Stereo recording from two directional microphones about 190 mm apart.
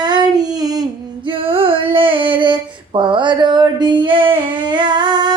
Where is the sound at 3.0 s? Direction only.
25° right (ahead or behind).